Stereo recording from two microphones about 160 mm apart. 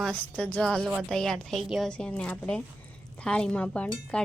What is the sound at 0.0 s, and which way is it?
A woman's voice, 5° left (ahead or behind).